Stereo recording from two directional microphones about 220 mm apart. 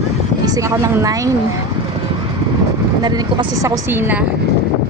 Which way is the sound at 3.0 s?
20° right (ahead or behind).